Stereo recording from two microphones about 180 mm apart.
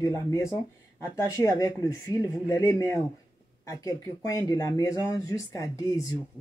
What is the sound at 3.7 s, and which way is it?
Speech, 20° left (ahead or behind).